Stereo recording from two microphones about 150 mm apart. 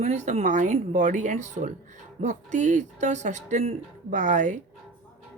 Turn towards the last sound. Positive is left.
turn(degrees=-55)  # may be behind; listen again after turning